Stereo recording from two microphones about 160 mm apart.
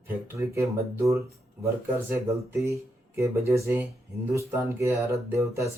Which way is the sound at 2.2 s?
20° right (ahead or behind).